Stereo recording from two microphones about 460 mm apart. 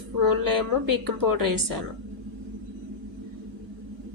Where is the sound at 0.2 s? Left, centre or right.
Right.